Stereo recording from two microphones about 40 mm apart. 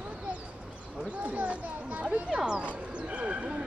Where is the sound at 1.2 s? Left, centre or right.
Right.